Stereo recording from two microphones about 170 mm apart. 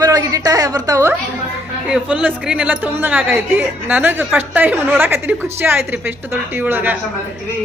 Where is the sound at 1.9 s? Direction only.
5° right (ahead or behind).